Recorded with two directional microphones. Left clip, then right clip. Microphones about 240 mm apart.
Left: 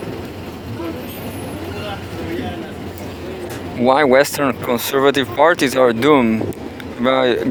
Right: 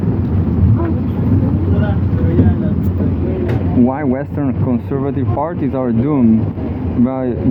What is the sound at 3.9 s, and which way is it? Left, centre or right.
Speech, left.